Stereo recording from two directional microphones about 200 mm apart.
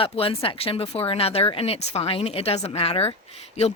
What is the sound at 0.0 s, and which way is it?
Speech, 25° left (ahead or behind).